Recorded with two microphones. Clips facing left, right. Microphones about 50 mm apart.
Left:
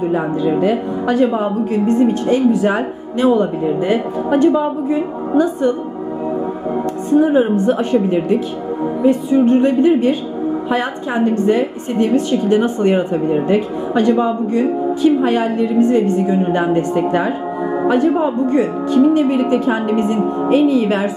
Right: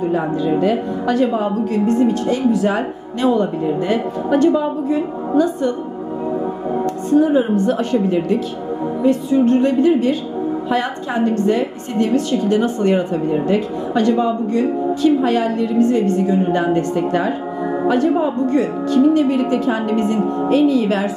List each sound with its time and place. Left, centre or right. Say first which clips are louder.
0.1 s a woman's voice: left 1 dB; centre
7.2 s a woman's voice: left 2 dB; centre